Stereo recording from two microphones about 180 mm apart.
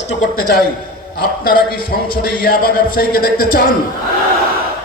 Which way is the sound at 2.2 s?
55° left (ahead or behind).